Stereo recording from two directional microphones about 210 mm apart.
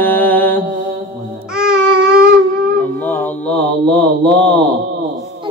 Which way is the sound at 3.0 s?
10° left (ahead or behind).